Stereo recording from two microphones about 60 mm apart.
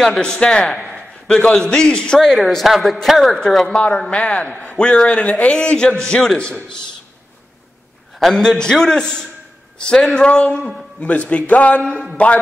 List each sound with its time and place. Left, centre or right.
0.0 s a man's voice: centre
8.2 s a man's voice: centre
11.8 s speech: centre